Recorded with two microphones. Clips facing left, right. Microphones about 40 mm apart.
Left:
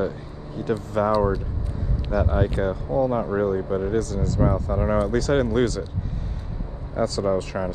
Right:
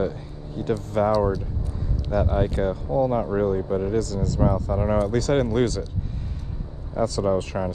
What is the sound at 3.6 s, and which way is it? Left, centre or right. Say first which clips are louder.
Speech: even; left.